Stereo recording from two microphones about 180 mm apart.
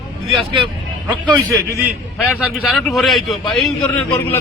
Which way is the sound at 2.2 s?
5° right (ahead or behind).